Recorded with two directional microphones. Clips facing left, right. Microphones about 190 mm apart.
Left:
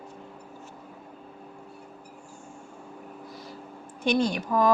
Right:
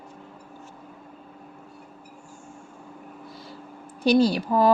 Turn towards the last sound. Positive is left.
turn(degrees=-30)  # may be behind; listen again after turning